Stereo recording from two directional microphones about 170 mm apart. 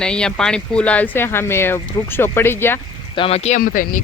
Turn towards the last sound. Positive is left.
turn(degrees=55)  # may be behind; listen again after turning